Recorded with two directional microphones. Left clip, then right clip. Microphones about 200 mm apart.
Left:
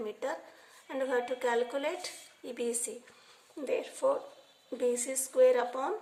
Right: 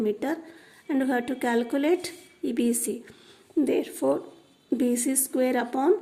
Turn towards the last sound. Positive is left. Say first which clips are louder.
# right 4 dB
turn(degrees=-45)  # may be behind; listen again after turning